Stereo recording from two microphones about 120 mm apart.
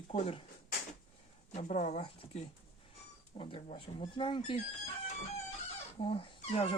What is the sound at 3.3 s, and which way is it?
Speech, 50° left (ahead or behind).